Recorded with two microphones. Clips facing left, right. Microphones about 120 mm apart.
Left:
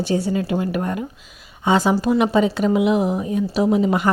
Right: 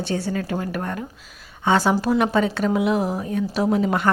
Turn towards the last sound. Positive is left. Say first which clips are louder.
# left 3 dB
turn(degrees=5)  # may be behind; listen again after turning